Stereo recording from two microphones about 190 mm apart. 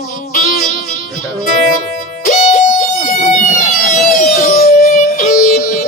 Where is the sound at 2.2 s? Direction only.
40° left (ahead or behind).